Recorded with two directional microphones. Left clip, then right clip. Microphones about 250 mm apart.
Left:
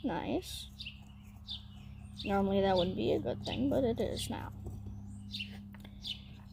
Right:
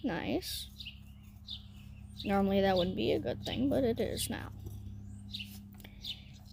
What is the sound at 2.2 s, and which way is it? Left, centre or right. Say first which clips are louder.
Speech: right 1 dB; right.